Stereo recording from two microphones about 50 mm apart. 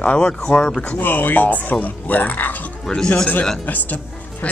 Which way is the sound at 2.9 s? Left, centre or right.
Centre.